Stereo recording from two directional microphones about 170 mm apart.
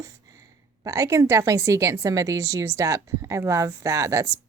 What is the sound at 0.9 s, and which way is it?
A woman's voice, 20° right (ahead or behind).